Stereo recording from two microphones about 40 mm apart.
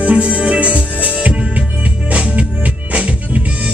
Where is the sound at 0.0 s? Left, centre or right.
Right.